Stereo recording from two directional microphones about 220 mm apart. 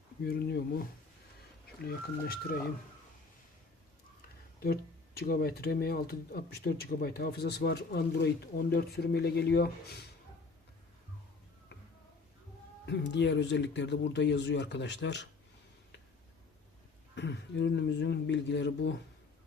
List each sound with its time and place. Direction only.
0.3 s speech: 45° left (ahead or behind)
4.6 s speech: 45° left (ahead or behind)
12.8 s speech: 50° left (ahead or behind)
17.2 s speech: 50° left (ahead or behind)